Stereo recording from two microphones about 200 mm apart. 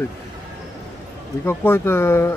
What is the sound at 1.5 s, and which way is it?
Speech, 10° left (ahead or behind).